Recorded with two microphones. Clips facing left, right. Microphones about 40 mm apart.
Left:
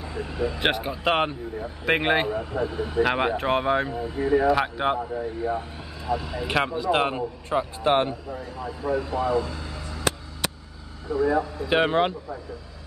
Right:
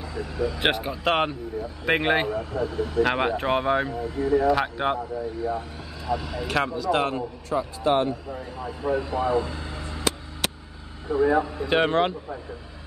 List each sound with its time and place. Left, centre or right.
0.0 s speech: left
0.6 s speech: centre
2.3 s a man's voice: centre
3.0 s speech: centre
3.9 s a man's voice: left
4.5 s speech: centre
5.1 s a man's voice: left
6.0 s speech: centre
6.4 s a man's voice: left
7.5 s a man's voice: left
8.4 s speech: centre; by 10.0 s right
11.1 s speech: right
11.7 s speech: centre